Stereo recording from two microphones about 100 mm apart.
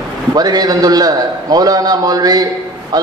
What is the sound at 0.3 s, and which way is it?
A man's voice, 40° right (ahead or behind).